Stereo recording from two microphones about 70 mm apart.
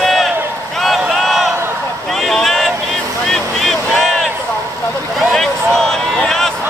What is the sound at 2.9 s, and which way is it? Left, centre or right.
Vehicle, centre.